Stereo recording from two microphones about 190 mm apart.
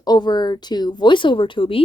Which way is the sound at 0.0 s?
20° left (ahead or behind).